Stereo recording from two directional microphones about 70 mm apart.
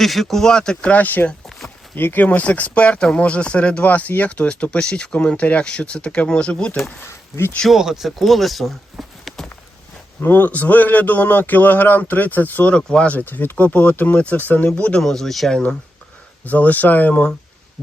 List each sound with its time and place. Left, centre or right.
0.0 s speech: centre; by 1.4 s left
1.5 s a sound: centre
2.0 s speech: left
7.0 s speech: left
7.8 s speech: centre
10.2 s a man's voice: left
15.0 s speech: centre
16.5 s a man's voice: left